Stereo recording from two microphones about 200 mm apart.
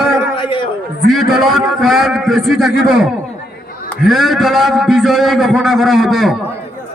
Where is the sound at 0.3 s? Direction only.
25° left (ahead or behind).